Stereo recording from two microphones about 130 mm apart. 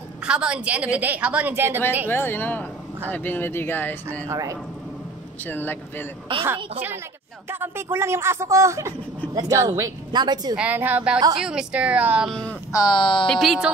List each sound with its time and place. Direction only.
0.2 s a woman's voice: 5° right (ahead or behind)
2.0 s speech: 15° left (ahead or behind)
4.3 s speech: 25° right (ahead or behind)
5.4 s speech: 15° left (ahead or behind)
7.4 s speech: 15° right (ahead or behind); by 10.5 s 35° right (ahead or behind)
10.5 s a woman's voice: 10° right (ahead or behind)
12.3 s speech: 5° left (ahead or behind)
12.7 s speech: 35° left (ahead or behind)
13.3 s speech: centre (ahead or behind)